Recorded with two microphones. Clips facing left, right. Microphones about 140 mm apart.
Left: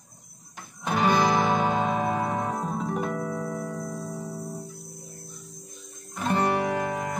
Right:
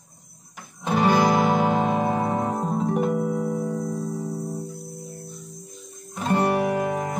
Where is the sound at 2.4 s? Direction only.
Centre (ahead or behind).